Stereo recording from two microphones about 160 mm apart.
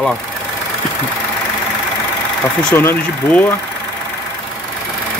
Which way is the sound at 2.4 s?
5° left (ahead or behind).